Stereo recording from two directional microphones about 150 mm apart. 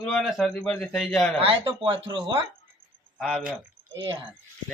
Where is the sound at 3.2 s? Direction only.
5° right (ahead or behind).